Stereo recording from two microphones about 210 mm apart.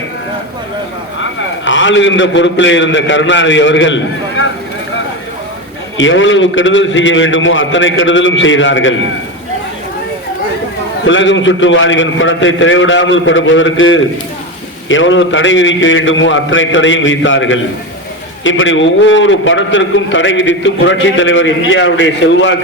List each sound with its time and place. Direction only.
1.2 s a man's voice: 65° left (ahead or behind)
6.0 s a man's voice: 65° left (ahead or behind)
11.0 s a man's voice: 65° left (ahead or behind)